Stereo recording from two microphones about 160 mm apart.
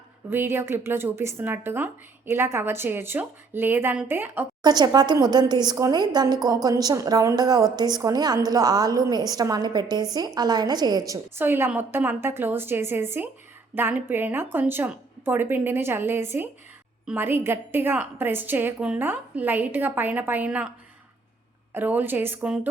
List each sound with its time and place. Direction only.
0.3 s speech: 15° right (ahead or behind)
4.6 s a woman's voice: 25° right (ahead or behind); by 20.7 s 10° right (ahead or behind)
21.7 s speech: 10° right (ahead or behind)